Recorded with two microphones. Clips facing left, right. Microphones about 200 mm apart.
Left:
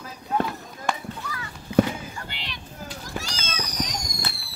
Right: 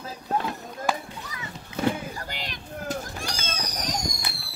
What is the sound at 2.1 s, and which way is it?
Fireworks, 40° right (ahead or behind).